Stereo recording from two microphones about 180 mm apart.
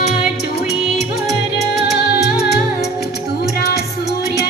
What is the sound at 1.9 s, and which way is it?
Music, 65° left (ahead or behind).